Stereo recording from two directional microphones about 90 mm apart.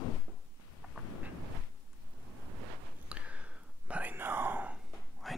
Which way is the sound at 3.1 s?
15° right (ahead or behind).